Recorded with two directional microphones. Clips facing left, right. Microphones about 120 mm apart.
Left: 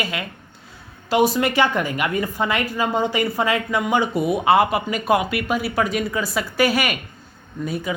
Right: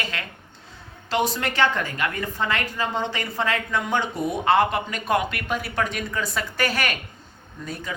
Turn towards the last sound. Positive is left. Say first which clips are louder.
# left 8 dB
turn(degrees=10)  # may be behind; listen again after turning